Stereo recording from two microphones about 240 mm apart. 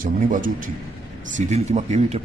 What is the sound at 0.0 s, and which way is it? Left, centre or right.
A man's voice, right.